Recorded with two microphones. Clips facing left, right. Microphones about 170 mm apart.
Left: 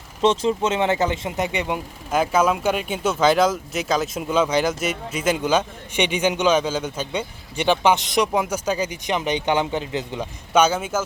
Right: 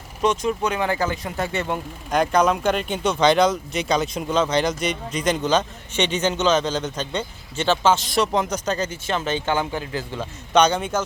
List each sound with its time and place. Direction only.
0.2 s speech: 25° left (ahead or behind)
8.3 s speech: 10° left (ahead or behind)
10.5 s speech: 5° left (ahead or behind)